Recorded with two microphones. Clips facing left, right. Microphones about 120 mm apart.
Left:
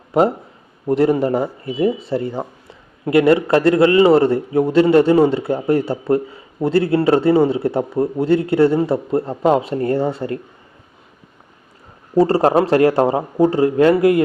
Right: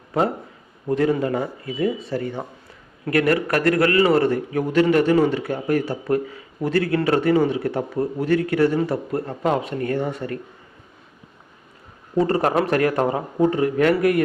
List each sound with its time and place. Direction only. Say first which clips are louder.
0.1 s a man's voice: left 6 dB; 25° left (ahead or behind)
12.1 s speech: left 6 dB; 30° left (ahead or behind)